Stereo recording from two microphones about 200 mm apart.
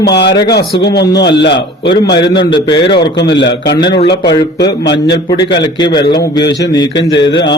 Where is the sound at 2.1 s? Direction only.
25° left (ahead or behind).